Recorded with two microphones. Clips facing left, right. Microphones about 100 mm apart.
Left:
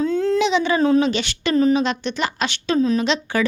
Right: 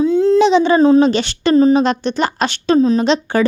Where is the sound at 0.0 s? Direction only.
15° right (ahead or behind).